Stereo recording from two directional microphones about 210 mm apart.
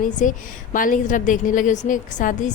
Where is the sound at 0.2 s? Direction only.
40° left (ahead or behind).